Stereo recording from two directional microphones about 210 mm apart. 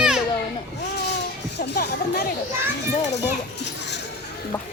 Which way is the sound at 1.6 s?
50° left (ahead or behind).